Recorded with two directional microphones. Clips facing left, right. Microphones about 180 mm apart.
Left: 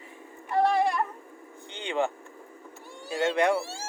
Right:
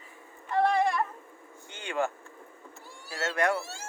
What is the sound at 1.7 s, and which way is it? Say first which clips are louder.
Vehicle: left 2 dB; 20° left (ahead or behind).